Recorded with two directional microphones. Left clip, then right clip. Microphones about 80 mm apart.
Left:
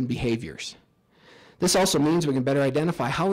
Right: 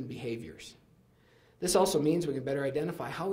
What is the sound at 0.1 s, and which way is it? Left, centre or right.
A man's voice, left.